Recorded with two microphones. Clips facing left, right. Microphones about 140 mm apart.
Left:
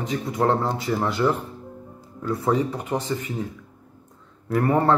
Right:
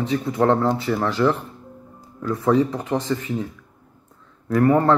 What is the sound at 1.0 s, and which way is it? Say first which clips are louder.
Speech: right 2 dB; 10° left (ahead or behind).